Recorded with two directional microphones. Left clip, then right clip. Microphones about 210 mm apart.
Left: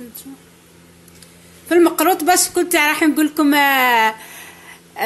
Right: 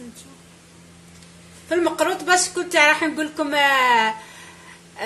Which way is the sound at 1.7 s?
45° left (ahead or behind).